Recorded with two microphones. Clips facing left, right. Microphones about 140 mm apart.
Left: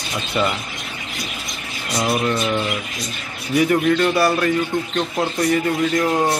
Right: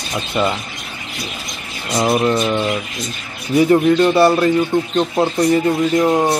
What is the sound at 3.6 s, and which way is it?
Speech, 25° right (ahead or behind).